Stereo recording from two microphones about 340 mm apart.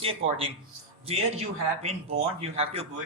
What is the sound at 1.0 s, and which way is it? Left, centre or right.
Speech, centre.